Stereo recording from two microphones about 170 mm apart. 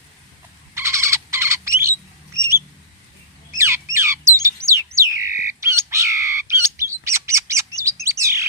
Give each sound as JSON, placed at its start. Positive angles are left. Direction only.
{"t": 0.7, "sound": "frog", "side_deg": -15}
{"t": 2.4, "sound": "bird", "side_deg": -15}
{"t": 8.0, "sound": "chirp", "side_deg": -15}